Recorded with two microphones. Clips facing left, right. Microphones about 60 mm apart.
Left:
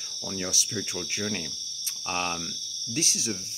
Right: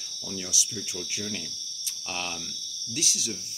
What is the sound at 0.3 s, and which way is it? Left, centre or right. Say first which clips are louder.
Speech: left 3 dB; left.